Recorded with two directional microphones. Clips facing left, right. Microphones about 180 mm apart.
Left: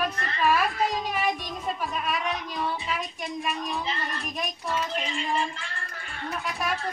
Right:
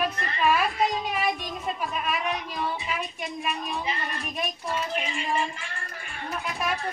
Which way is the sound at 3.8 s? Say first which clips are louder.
Even; 15° right (ahead or behind).